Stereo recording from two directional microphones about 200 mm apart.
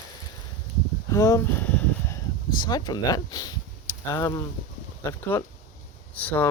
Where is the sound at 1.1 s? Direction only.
15° left (ahead or behind).